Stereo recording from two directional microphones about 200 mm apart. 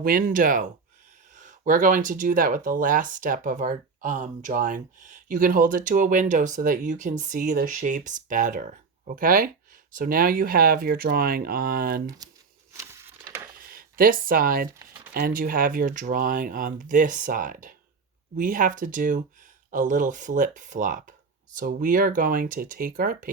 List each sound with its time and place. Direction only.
0.0 s speech: 45° right (ahead or behind)
12.7 s a sound: 15° right (ahead or behind)
13.7 s speech: 45° right (ahead or behind)